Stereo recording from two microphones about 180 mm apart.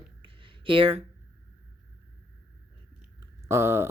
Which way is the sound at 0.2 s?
30° right (ahead or behind).